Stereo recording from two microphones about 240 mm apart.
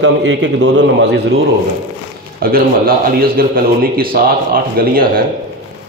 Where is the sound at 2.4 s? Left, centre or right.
Right.